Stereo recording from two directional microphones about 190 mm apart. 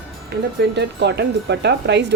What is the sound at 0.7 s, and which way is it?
Speech, 65° right (ahead or behind).